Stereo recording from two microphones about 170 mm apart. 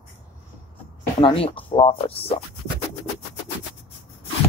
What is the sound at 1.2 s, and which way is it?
Speech, 35° left (ahead or behind).